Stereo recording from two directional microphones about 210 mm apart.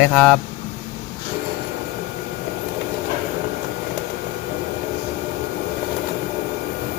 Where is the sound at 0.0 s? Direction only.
10° left (ahead or behind).